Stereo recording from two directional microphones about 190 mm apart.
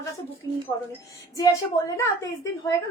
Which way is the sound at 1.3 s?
15° left (ahead or behind).